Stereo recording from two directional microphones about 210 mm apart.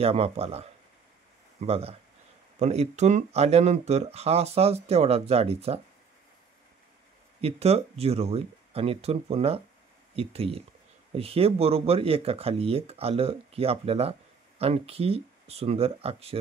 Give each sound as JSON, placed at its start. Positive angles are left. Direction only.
{"t": 0.0, "sound": "speech", "side_deg": -30}
{"t": 7.4, "sound": "speech", "side_deg": -30}